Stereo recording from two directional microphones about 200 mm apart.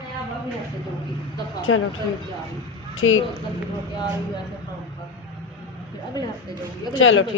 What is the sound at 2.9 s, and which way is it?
Speech, 90° left.